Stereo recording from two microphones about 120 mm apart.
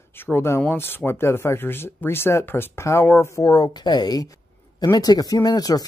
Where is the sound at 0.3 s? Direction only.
20° left (ahead or behind).